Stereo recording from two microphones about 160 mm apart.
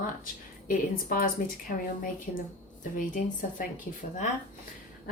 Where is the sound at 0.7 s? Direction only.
60° left (ahead or behind).